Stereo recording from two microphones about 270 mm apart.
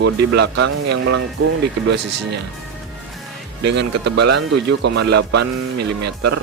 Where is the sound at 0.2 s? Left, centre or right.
Right.